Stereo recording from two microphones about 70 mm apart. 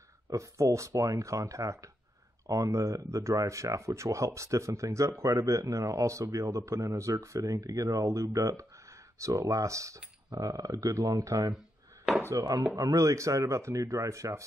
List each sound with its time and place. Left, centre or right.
0.3 s speech: right
10.3 s speech: right
12.2 s chopping: right
12.7 s speech: right